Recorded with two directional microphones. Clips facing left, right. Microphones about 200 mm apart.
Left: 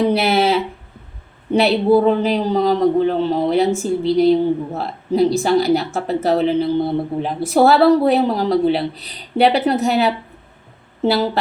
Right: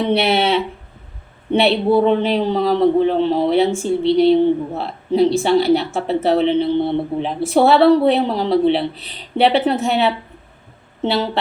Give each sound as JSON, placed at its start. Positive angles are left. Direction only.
{"t": 0.0, "sound": "a man's voice", "side_deg": 0}